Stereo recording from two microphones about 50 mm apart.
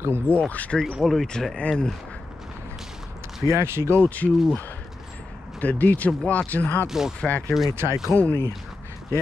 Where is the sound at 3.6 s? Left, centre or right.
Right.